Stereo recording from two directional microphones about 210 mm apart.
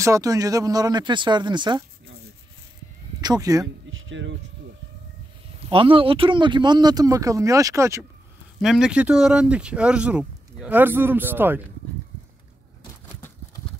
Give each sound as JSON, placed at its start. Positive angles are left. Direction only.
{"t": 0.0, "sound": "speech", "side_deg": -15}
{"t": 3.2, "sound": "speech", "side_deg": -20}
{"t": 3.6, "sound": "speech", "side_deg": -65}
{"t": 5.7, "sound": "speech", "side_deg": -25}
{"t": 8.5, "sound": "speech", "side_deg": 0}